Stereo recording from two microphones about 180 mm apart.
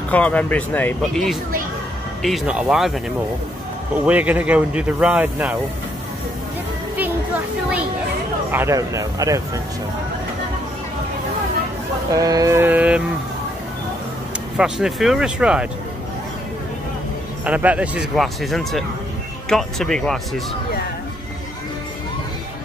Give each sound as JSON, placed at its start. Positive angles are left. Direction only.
{"t": 0.1, "sound": "speech", "side_deg": 10}
{"t": 8.5, "sound": "speech", "side_deg": -15}
{"t": 12.1, "sound": "speech", "side_deg": -20}
{"t": 14.6, "sound": "speech", "side_deg": 0}
{"t": 17.5, "sound": "speech", "side_deg": -5}